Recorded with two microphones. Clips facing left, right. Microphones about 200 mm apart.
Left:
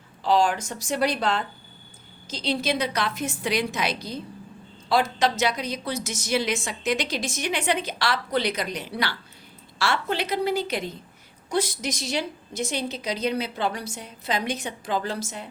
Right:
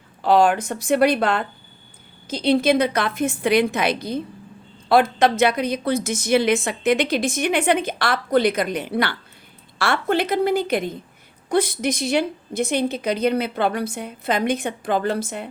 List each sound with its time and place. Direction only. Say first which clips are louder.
0.2 s a woman's voice: right 5 dB; 60° right (ahead or behind)